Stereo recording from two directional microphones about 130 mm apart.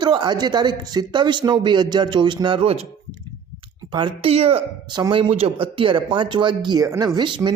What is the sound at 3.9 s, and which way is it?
Speech, 40° right (ahead or behind).